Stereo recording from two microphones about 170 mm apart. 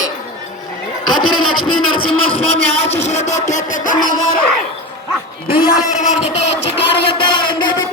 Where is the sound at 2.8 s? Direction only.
40° left (ahead or behind).